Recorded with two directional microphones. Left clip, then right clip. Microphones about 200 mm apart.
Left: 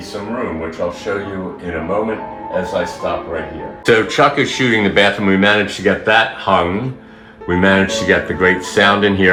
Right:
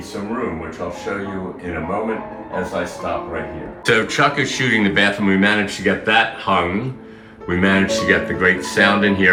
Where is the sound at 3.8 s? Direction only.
15° left (ahead or behind).